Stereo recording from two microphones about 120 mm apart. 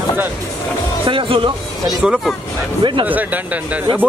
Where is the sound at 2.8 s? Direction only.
45° right (ahead or behind).